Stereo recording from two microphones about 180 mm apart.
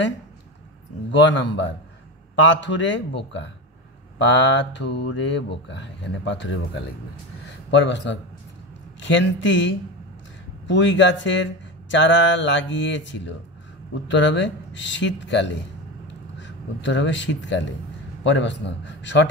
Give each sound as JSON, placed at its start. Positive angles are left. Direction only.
{"t": 1.1, "sound": "mantra", "side_deg": 85}
{"t": 4.2, "sound": "mantra", "side_deg": 90}
{"t": 7.7, "sound": "speech", "side_deg": 90}
{"t": 18.2, "sound": "mantra", "side_deg": 85}